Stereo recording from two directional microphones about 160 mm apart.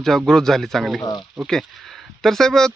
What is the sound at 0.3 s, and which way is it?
Speech, 5° left (ahead or behind).